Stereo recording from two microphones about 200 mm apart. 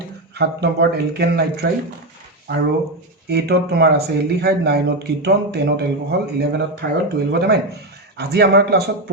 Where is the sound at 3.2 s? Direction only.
55° right (ahead or behind).